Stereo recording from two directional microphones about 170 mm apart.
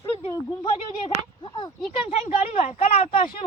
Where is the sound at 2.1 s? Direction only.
40° left (ahead or behind).